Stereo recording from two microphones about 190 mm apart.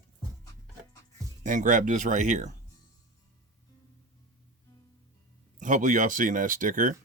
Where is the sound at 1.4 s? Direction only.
45° right (ahead or behind).